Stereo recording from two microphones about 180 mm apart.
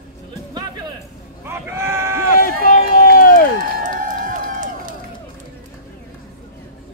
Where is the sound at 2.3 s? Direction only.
55° left (ahead or behind).